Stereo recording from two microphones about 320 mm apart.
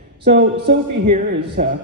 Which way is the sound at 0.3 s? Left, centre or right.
Right.